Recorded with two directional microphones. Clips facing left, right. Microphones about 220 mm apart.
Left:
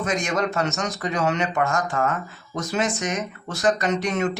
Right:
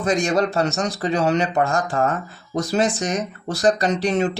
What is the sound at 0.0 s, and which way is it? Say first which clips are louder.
Speech: right 5 dB; 35° right (ahead or behind).